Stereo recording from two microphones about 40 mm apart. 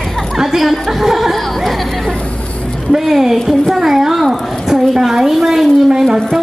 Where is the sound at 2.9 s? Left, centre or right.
Centre.